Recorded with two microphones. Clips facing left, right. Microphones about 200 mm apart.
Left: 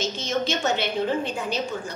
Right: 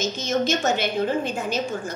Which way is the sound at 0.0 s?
45° right (ahead or behind).